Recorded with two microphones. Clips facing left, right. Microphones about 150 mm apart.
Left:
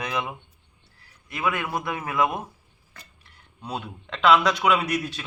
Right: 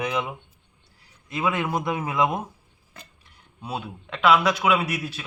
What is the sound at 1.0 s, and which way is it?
A man's voice, 20° right (ahead or behind).